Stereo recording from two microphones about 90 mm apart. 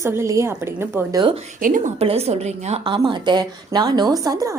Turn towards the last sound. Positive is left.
turn(degrees=-40)  # may be behind; listen again after turning